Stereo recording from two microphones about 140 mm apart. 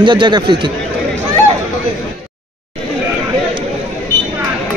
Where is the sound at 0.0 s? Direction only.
35° right (ahead or behind).